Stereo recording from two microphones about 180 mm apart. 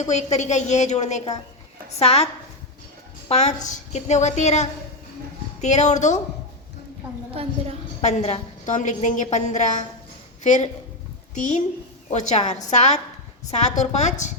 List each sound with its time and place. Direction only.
0.1 s a woman's voice: 40° left (ahead or behind)
8.0 s a woman's voice: 40° left (ahead or behind)